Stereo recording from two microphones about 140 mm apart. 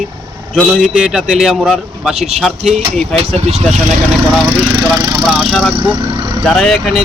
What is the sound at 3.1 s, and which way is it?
Speech, 50° right (ahead or behind).